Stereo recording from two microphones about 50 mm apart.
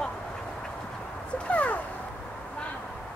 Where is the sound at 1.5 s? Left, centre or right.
Left.